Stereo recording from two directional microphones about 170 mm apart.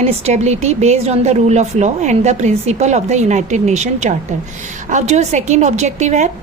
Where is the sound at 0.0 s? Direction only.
40° right (ahead or behind).